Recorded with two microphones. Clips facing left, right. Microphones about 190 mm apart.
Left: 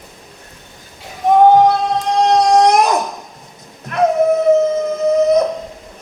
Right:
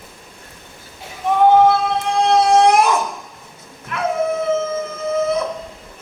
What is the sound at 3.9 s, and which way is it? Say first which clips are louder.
Howl: left 7 dB; 40° left (ahead or behind).